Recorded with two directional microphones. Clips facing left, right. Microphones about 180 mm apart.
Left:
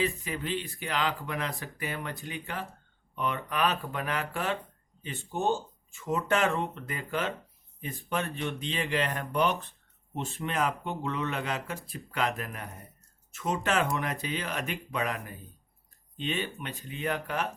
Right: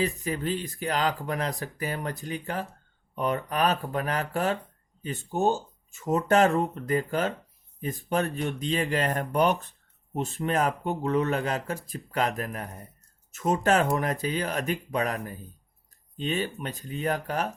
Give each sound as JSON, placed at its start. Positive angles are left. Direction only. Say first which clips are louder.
{"t": 0.0, "sound": "speech", "louder": "right 3 dB", "side_deg": -40}